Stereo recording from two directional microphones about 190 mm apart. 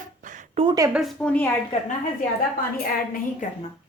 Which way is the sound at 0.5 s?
20° right (ahead or behind).